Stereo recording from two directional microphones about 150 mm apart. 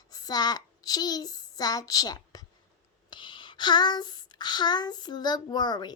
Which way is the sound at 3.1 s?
35° left (ahead or behind).